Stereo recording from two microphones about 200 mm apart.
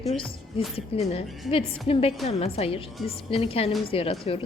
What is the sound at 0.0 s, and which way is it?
A woman's voice, 30° left (ahead or behind).